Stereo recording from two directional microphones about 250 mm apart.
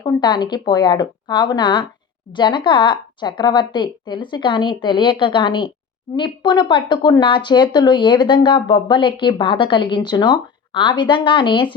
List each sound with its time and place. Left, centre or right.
0.0 s speech: centre